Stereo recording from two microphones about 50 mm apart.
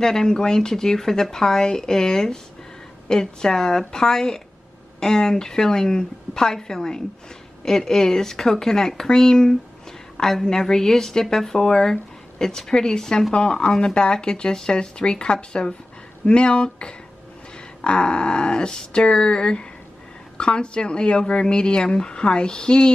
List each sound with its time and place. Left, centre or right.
0.0 s a woman's voice: centre